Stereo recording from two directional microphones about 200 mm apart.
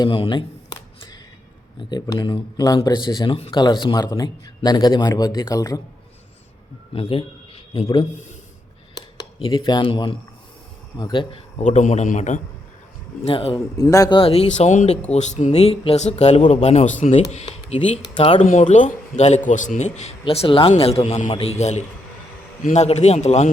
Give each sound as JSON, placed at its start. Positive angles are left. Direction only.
{"t": 0.0, "sound": "a sound", "side_deg": 25}
{"t": 1.8, "sound": "speech", "side_deg": 20}
{"t": 6.9, "sound": "a man's voice", "side_deg": 25}
{"t": 13.2, "sound": "speech", "side_deg": 25}
{"t": 17.4, "sound": "speech", "side_deg": 25}